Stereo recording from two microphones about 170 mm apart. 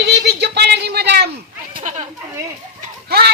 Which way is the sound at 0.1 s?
75° right (ahead or behind).